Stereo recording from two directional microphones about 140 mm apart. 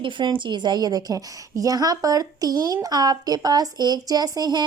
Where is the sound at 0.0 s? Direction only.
35° right (ahead or behind).